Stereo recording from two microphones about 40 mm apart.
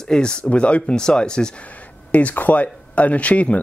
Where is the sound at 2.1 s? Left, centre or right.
Left.